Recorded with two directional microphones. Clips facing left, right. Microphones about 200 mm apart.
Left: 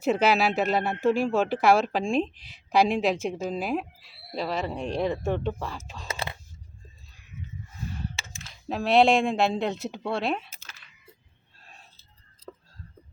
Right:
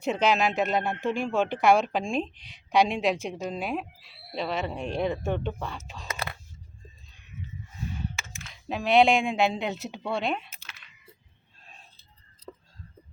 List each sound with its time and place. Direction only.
0.0 s speech: 5° left (ahead or behind)
6.1 s a sound: 30° left (ahead or behind)
8.7 s speech: centre (ahead or behind)